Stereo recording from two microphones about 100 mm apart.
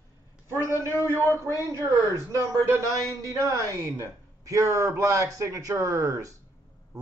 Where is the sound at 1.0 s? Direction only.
25° left (ahead or behind).